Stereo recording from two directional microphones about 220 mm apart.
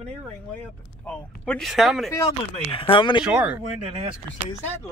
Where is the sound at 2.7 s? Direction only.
25° left (ahead or behind).